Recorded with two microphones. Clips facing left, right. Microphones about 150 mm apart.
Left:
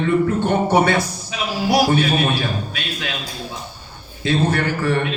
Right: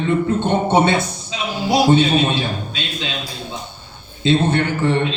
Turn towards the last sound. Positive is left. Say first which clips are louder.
# right 2 dB
turn(degrees=-25)  # may be behind; listen again after turning